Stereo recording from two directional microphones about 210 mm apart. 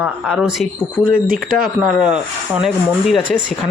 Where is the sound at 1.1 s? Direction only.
40° right (ahead or behind).